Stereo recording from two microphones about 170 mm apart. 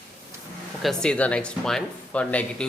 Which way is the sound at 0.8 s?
5° left (ahead or behind).